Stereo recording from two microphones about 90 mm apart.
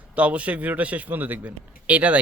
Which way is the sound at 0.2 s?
15° right (ahead or behind).